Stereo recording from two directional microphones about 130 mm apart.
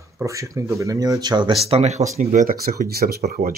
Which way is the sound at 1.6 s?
55° right (ahead or behind).